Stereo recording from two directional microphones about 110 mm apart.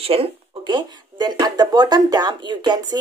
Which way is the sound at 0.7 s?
40° right (ahead or behind).